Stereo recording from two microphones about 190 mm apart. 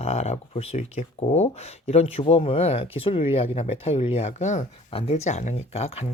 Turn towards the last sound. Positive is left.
turn(degrees=35)  # may be behind; listen again after turning